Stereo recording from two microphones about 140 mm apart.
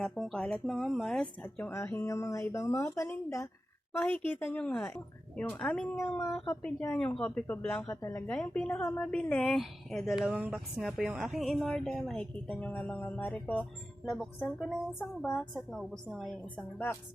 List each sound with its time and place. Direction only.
0.0 s speech: 5° left (ahead or behind)
6.0 s speech: 20° left (ahead or behind)
6.9 s a woman's voice: 10° left (ahead or behind)
14.0 s a woman's voice: centre (ahead or behind)